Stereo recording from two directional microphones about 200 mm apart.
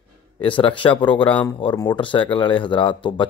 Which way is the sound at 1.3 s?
5° left (ahead or behind).